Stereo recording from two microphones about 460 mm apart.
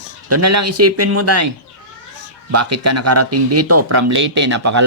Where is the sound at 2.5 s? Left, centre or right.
Right.